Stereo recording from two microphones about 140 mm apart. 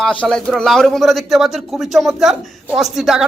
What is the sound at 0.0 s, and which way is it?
A man's voice, 5° left (ahead or behind).